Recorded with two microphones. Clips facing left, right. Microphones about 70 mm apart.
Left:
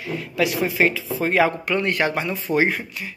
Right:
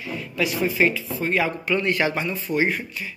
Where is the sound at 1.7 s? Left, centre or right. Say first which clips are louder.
Left 1 dB; left.